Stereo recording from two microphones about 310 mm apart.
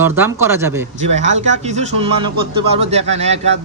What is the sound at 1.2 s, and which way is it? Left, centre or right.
Speech, right.